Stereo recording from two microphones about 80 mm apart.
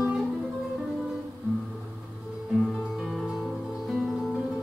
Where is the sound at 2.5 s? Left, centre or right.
Centre.